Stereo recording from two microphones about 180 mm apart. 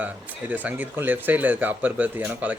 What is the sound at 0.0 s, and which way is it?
A man's voice, 10° right (ahead or behind).